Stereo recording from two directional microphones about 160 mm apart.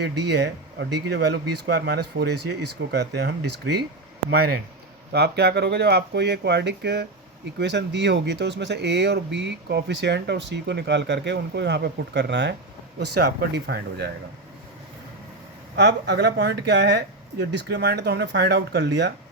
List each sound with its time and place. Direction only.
0.0 s speech: 90° right
4.3 s speech: 70° right (ahead or behind)
5.1 s speech: 90° right
15.7 s speech: 90° right